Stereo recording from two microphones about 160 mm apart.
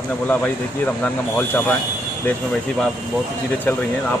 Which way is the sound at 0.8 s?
10° left (ahead or behind).